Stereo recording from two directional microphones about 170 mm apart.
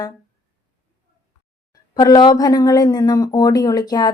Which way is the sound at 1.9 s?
25° left (ahead or behind).